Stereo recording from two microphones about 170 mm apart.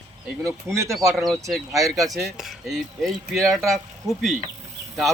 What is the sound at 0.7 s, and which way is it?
Speech, 15° right (ahead or behind).